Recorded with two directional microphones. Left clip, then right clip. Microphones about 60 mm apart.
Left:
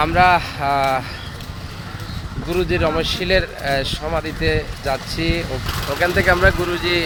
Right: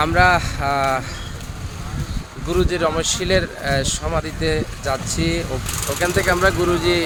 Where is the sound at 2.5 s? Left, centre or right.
Right.